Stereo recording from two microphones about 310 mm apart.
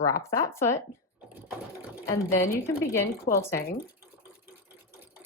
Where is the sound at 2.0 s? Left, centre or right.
Centre.